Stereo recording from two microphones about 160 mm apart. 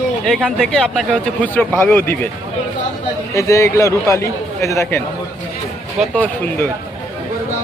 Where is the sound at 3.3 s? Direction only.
20° left (ahead or behind).